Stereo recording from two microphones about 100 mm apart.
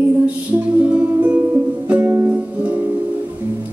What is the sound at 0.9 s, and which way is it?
Music, 15° right (ahead or behind).